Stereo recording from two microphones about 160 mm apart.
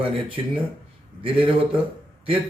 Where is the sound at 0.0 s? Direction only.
35° right (ahead or behind).